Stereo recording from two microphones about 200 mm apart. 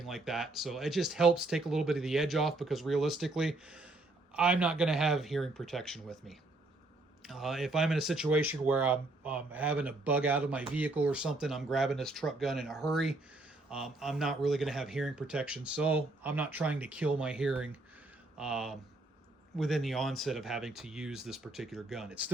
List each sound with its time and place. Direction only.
0.0 s speech: centre (ahead or behind)